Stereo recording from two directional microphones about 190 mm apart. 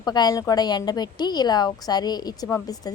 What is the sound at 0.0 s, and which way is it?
A woman's voice, 20° left (ahead or behind).